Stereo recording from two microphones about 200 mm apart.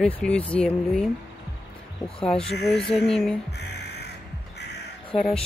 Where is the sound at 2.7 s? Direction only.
Centre (ahead or behind).